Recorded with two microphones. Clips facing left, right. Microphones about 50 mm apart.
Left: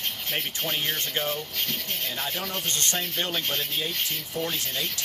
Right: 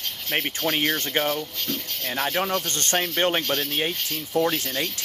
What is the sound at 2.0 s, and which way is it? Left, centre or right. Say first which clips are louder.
Speech: right 10 dB; right.